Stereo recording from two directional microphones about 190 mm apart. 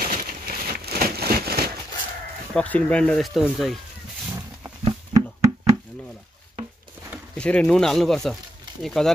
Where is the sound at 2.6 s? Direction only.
5° left (ahead or behind).